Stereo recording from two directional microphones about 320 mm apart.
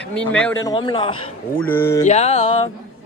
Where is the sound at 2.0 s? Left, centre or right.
Left.